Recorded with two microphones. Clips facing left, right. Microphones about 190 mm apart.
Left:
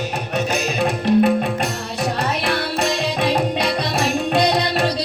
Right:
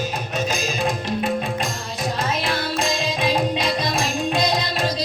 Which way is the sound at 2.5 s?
70° left (ahead or behind).